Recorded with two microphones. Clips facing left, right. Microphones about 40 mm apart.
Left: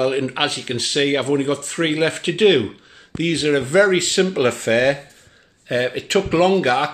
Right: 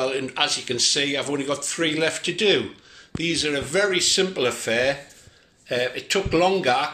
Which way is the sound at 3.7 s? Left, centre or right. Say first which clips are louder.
Left 5 dB; left.